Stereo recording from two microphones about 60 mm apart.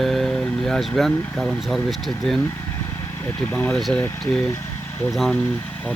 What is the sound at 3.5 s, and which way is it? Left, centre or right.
Speech, left.